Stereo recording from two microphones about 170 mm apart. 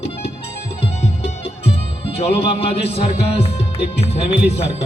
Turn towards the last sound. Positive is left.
turn(degrees=35)  # may be behind; listen again after turning